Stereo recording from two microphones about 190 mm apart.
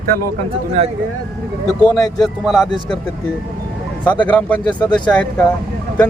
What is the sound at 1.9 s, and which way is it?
Speech, 20° left (ahead or behind).